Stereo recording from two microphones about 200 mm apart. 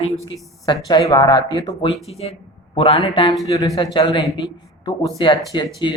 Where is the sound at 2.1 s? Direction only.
30° left (ahead or behind).